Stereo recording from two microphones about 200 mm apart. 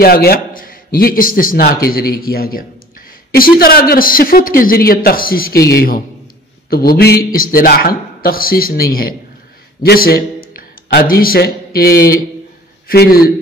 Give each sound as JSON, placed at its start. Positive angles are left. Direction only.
{"t": 0.0, "sound": "a man's voice", "side_deg": 50}
{"t": 9.8, "sound": "a man's voice", "side_deg": 50}